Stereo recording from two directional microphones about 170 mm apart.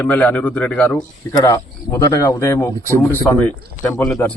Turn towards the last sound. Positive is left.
turn(degrees=5)  # may be behind; listen again after turning